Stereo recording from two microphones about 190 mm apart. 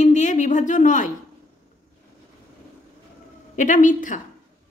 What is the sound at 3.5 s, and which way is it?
Speech, 40° left (ahead or behind).